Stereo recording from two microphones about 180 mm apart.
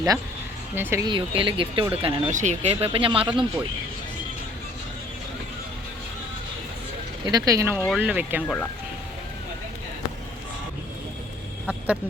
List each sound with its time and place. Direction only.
0.8 s speech: 15° right (ahead or behind)
1.0 s speech: 30° right (ahead or behind)
2.3 s speech: 40° right (ahead or behind)
7.3 s speech: 20° right (ahead or behind)
11.6 s a sound: centre (ahead or behind)